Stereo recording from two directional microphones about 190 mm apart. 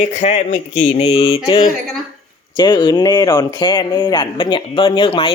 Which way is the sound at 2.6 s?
25° left (ahead or behind).